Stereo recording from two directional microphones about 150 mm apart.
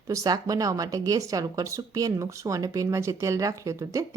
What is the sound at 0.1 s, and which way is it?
A woman's voice, 25° right (ahead or behind).